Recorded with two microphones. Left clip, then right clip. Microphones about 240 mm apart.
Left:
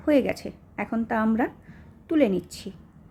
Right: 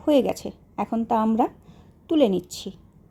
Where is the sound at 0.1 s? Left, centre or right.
Centre.